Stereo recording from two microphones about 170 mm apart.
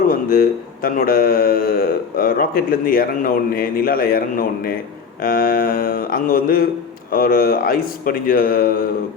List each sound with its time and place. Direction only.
0.1 s speech: 60° left (ahead or behind)